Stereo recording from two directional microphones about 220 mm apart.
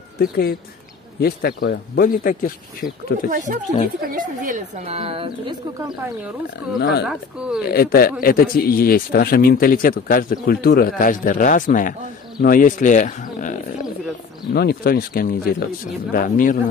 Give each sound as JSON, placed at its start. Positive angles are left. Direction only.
{"t": 0.2, "sound": "speech", "side_deg": 40}
{"t": 3.3, "sound": "a woman's voice", "side_deg": -35}
{"t": 6.8, "sound": "speech", "side_deg": 50}
{"t": 7.1, "sound": "speech", "side_deg": -5}
{"t": 7.6, "sound": "speech", "side_deg": 45}